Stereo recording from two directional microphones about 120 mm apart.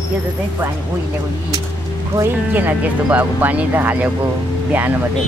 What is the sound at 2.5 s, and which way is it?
Speech, 15° right (ahead or behind).